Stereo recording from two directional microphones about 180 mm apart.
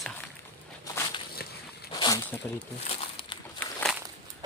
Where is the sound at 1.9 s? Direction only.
20° left (ahead or behind).